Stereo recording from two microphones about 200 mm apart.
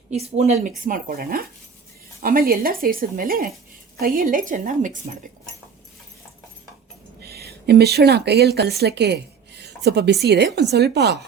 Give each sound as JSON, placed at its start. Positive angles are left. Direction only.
{"t": 0.1, "sound": "a woman's voice", "side_deg": -30}
{"t": 0.9, "sound": "speech", "side_deg": -45}
{"t": 7.2, "sound": "speech", "side_deg": -50}